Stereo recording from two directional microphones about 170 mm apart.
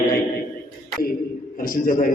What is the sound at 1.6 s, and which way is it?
Speech, 55° left (ahead or behind).